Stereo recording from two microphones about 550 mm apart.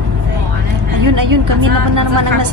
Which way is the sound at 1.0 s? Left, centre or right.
Right.